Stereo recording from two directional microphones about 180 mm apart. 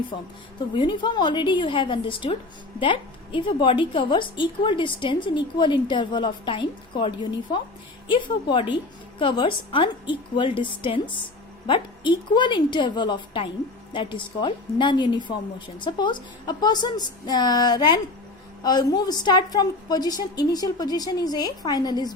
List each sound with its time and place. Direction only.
0.7 s a woman's voice: 25° left (ahead or behind)